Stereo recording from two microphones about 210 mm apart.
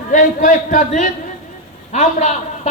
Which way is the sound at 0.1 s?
40° left (ahead or behind).